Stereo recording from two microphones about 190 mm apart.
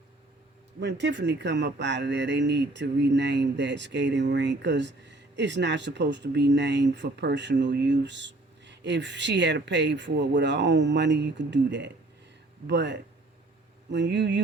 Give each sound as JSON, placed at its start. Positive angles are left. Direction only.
{"t": 0.8, "sound": "speech", "side_deg": -65}